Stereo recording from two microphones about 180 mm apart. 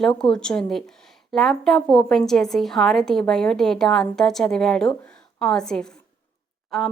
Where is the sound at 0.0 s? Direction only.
5° left (ahead or behind).